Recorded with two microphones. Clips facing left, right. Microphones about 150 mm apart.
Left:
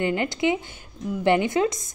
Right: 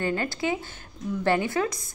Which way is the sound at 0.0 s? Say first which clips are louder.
Left 4 dB; 20° left (ahead or behind).